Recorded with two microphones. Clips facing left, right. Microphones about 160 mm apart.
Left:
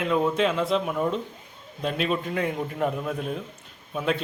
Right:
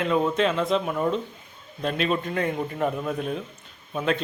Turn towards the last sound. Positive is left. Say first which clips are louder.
# right 1 dB
turn(degrees=5)  # may be behind; listen again after turning